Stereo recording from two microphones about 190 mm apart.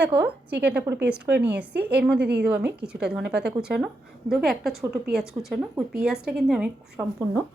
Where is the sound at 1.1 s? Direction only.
5° right (ahead or behind).